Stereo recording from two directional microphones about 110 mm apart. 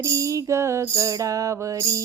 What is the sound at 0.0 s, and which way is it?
Music, 30° right (ahead or behind).